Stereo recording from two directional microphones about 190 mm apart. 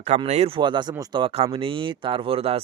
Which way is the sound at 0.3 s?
35° right (ahead or behind).